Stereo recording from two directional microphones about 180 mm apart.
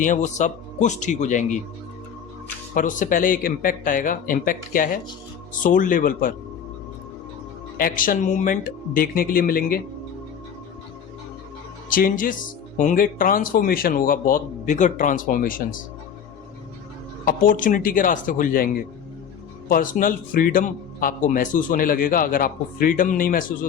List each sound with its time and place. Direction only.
0.0 s a man's voice: 45° left (ahead or behind)
2.7 s a man's voice: 45° left (ahead or behind)
7.8 s a man's voice: 50° left (ahead or behind)
11.9 s a man's voice: 50° left (ahead or behind)
17.2 s a man's voice: 50° left (ahead or behind)